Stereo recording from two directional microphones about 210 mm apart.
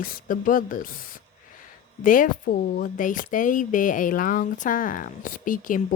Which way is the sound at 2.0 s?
40° left (ahead or behind).